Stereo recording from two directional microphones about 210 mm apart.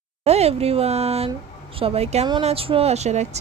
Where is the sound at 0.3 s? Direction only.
30° right (ahead or behind).